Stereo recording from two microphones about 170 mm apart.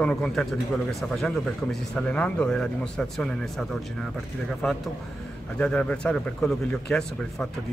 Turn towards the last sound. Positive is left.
turn(degrees=5)  # may be behind; listen again after turning